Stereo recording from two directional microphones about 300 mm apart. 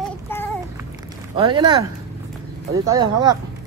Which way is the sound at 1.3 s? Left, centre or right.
Centre.